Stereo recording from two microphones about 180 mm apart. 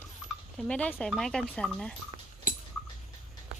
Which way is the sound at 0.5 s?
5° left (ahead or behind).